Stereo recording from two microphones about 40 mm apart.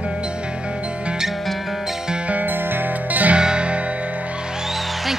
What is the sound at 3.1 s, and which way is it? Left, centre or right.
Music, right.